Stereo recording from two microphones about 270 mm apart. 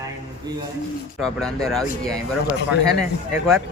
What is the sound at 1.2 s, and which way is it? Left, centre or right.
Speech, centre.